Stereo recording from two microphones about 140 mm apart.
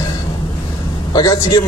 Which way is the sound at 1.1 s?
30° left (ahead or behind).